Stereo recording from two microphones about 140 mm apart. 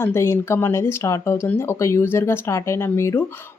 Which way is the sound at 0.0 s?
20° left (ahead or behind).